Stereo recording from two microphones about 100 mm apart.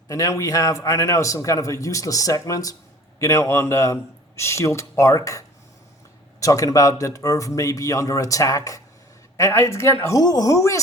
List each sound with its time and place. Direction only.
0.1 s a man's voice: 30° left (ahead or behind)
6.4 s a man's voice: 35° left (ahead or behind)
10.2 s speech: 45° left (ahead or behind)
10.5 s a man's voice: 30° left (ahead or behind)